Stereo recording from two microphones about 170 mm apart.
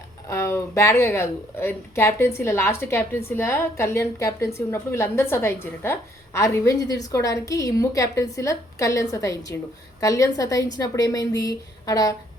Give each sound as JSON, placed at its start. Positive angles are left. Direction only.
{"t": 0.3, "sound": "a woman's voice", "side_deg": 15}